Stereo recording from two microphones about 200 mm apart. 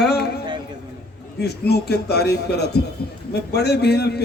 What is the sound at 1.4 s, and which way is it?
A man's voice, 55° left (ahead or behind).